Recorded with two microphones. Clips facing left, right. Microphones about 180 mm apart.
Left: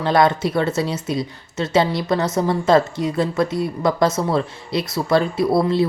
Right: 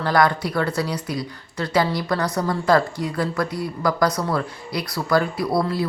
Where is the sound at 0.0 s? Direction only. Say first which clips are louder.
Left 3 dB; 25° left (ahead or behind).